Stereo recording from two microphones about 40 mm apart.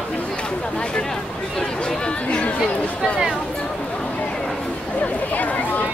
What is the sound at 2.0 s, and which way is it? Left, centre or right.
Chatter, left.